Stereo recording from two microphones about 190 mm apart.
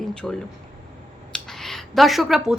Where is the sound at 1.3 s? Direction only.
Centre (ahead or behind).